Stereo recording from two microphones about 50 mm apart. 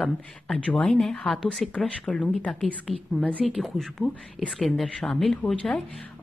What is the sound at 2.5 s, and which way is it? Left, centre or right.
A woman's voice, centre.